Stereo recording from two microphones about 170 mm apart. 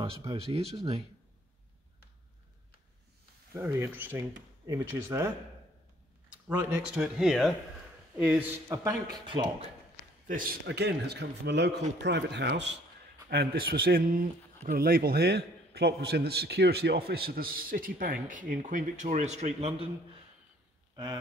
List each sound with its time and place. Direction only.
0.3 s speech: 35° right (ahead or behind)
3.5 s speech: 15° right (ahead or behind)
6.3 s speech: 10° right (ahead or behind)
9.1 s speech: 30° right (ahead or behind)
10.2 s speech: 55° right (ahead or behind); by 12.7 s 90° right
13.3 s a man's voice: 65° right (ahead or behind); by 19.9 s 40° right (ahead or behind)
20.9 s speech: 25° right (ahead or behind)